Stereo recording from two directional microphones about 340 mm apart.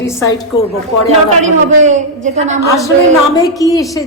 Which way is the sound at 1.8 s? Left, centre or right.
Right.